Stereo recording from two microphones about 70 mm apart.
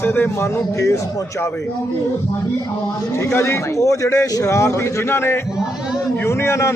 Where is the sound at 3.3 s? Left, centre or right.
Left.